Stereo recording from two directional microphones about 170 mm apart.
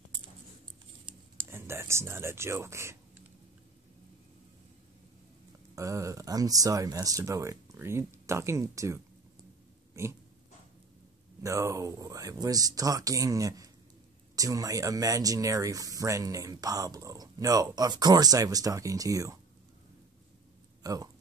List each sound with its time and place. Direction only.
1.5 s speech: 15° right (ahead or behind)
5.8 s speech: 20° right (ahead or behind)
9.9 s pig: 15° right (ahead or behind)
11.4 s speech: 15° right (ahead or behind)
20.8 s a sound: 20° right (ahead or behind)